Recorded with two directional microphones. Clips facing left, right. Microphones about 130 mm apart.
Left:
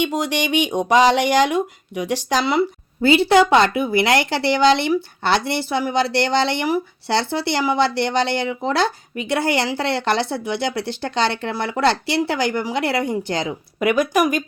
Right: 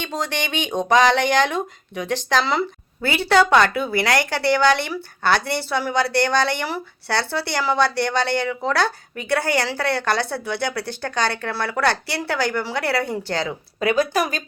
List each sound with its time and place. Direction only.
0.1 s speech: 10° left (ahead or behind)
3.0 s speech: 20° left (ahead or behind)